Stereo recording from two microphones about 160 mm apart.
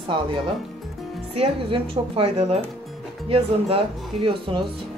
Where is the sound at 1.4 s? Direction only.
35° right (ahead or behind).